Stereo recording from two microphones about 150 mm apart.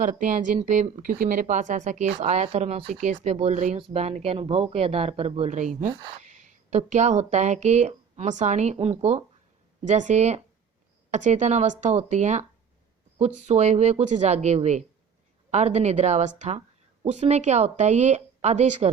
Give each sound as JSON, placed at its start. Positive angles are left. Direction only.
{"t": 0.0, "sound": "a woman's voice", "side_deg": -55}
{"t": 3.8, "sound": "speech", "side_deg": -40}
{"t": 5.9, "sound": "speech", "side_deg": -35}
{"t": 6.2, "sound": "a woman's voice", "side_deg": -55}